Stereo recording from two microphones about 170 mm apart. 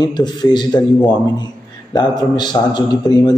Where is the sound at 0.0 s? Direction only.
25° left (ahead or behind).